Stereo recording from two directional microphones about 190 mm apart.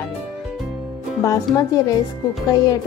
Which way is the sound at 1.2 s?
15° left (ahead or behind).